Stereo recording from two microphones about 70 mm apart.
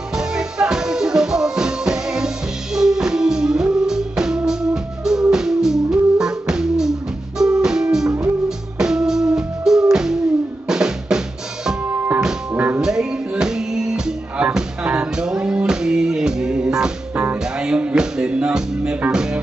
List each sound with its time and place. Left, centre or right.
0.1 s music: centre
10.7 s drum: centre
11.9 s music: right
12.8 s music: centre
17.1 s music: right
17.4 s music: centre